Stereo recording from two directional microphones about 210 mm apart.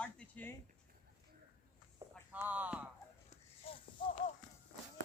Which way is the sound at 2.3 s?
10° right (ahead or behind).